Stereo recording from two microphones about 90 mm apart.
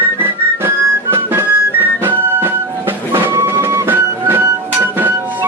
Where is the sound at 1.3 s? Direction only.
25° right (ahead or behind).